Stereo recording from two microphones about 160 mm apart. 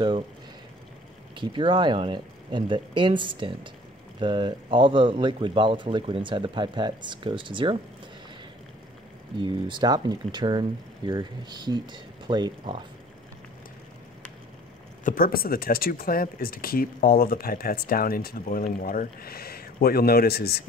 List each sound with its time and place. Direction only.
1.3 s speech: 30° right (ahead or behind)
9.4 s speech: 30° right (ahead or behind)
15.0 s speech: 65° left (ahead or behind); by 20.6 s 80° left